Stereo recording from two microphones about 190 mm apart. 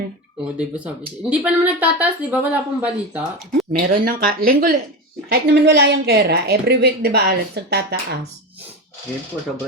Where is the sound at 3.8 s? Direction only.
50° right (ahead or behind).